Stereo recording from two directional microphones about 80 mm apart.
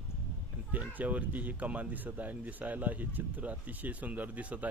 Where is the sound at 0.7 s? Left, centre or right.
Centre.